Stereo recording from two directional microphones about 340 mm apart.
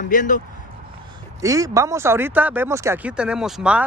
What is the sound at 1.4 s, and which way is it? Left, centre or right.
Speech, centre.